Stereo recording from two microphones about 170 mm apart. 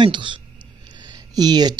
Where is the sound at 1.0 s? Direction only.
25° right (ahead or behind).